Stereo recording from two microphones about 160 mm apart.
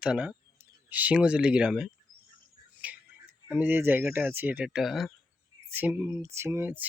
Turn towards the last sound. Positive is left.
turn(degrees=-15)  # may be behind; listen again after turning